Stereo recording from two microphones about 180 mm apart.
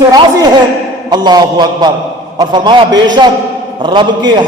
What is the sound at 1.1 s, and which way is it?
A man's voice, 25° right (ahead or behind).